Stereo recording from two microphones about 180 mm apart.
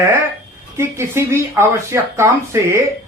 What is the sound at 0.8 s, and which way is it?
Speech, 15° right (ahead or behind).